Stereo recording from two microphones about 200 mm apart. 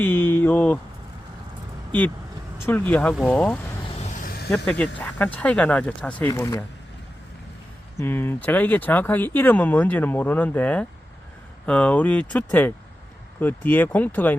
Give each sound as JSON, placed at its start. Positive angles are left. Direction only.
{"t": 0.0, "sound": "speech", "side_deg": 10}
{"t": 2.6, "sound": "speech", "side_deg": 10}
{"t": 3.9, "sound": "vehicle", "side_deg": 35}
{"t": 4.4, "sound": "speech", "side_deg": 5}
{"t": 7.9, "sound": "speech", "side_deg": 10}